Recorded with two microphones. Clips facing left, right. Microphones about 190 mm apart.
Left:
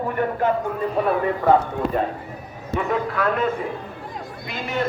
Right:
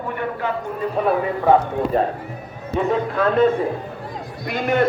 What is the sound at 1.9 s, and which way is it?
Speech, 35° right (ahead or behind).